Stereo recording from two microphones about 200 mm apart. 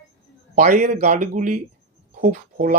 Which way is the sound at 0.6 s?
35° right (ahead or behind).